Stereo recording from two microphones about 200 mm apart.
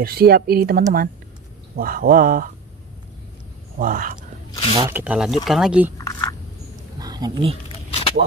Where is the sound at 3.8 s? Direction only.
45° right (ahead or behind).